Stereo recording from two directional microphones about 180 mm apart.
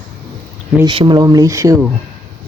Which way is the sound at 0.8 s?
25° right (ahead or behind).